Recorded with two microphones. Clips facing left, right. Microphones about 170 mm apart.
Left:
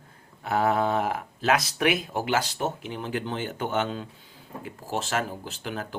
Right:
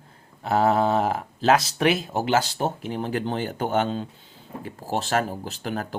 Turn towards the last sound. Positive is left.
turn(degrees=-40)  # may be behind; listen again after turning